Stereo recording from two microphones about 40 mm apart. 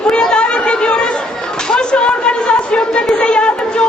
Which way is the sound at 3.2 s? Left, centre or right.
Left.